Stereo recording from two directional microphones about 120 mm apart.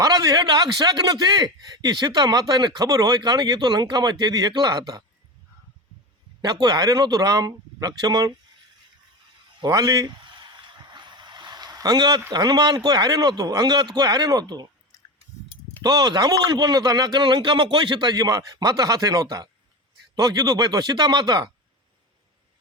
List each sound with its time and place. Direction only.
0.0 s a man's voice: 30° right (ahead or behind)
6.4 s a man's voice: 35° right (ahead or behind)
9.6 s a sound: 35° right (ahead or behind)
12.3 s a man's voice: 35° right (ahead or behind)
14.9 s a sound: 25° left (ahead or behind)
15.8 s a man's voice: 35° right (ahead or behind)